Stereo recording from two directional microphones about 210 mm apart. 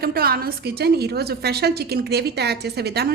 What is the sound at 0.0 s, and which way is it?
A woman's voice, 45° right (ahead or behind).